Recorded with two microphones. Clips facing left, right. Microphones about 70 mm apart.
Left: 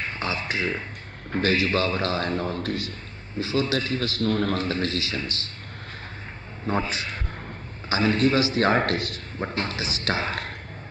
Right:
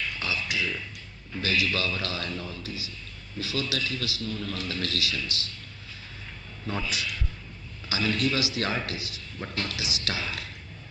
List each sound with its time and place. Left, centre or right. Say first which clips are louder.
0.0 s a man's voice: left 3 dB; left
3.3 s a man's voice: left 6 dB; left
6.6 s a man's voice: left 5 dB; left
9.4 s a man's voice: left 5 dB; left